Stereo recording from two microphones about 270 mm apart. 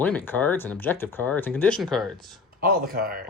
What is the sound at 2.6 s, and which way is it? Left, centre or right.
Speech, right.